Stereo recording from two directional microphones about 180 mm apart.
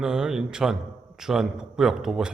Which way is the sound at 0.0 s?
5° right (ahead or behind).